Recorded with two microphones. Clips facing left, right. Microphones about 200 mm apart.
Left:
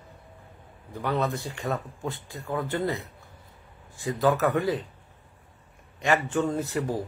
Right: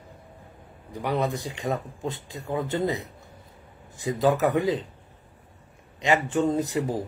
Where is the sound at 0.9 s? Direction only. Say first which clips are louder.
Right 1 dB; 15° right (ahead or behind).